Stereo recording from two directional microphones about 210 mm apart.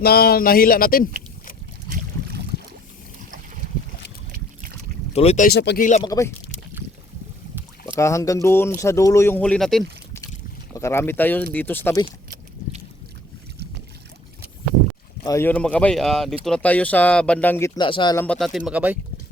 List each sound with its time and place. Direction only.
0.0 s speech: 45° left (ahead or behind)
5.1 s speech: 30° left (ahead or behind)
5.5 s speech: 50° left (ahead or behind)
5.8 s speech: 35° left (ahead or behind)
6.1 s speech: 15° left (ahead or behind)
7.9 s speech: 15° left (ahead or behind)
10.8 s speech: 10° left (ahead or behind)
15.2 s speech: 15° left (ahead or behind)
17.7 s speech: 20° left (ahead or behind)
18.3 s speech: centre (ahead or behind)